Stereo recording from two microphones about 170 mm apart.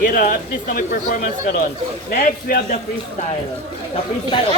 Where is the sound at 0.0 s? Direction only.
60° left (ahead or behind).